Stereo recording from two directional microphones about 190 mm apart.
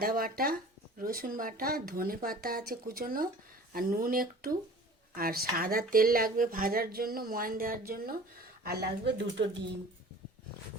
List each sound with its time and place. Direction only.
0.0 s speech: 50° right (ahead or behind)